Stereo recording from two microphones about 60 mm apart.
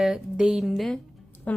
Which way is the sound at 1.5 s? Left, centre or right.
Left.